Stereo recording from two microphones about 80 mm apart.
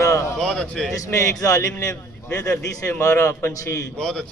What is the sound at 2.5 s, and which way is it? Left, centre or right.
A man's voice, left.